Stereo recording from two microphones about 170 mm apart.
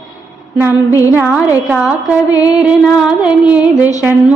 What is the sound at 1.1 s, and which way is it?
Female singing, 10° right (ahead or behind).